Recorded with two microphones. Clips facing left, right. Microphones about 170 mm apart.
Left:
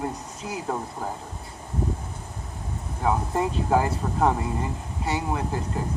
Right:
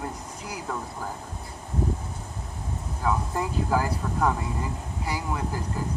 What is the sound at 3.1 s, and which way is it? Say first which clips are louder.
Speech: left 3 dB; 25° left (ahead or behind).